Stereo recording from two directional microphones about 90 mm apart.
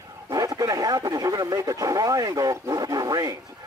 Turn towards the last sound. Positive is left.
turn(degrees=-40)  # may be behind; listen again after turning